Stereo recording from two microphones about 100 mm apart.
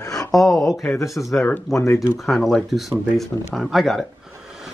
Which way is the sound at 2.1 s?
Centre (ahead or behind).